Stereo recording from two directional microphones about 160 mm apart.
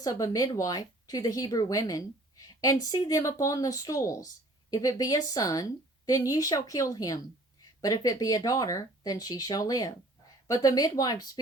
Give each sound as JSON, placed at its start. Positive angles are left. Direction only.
{"t": 0.0, "sound": "speech", "side_deg": 20}